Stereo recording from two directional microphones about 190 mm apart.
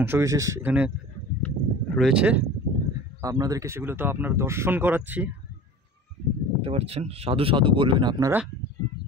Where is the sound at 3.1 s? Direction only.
15° right (ahead or behind).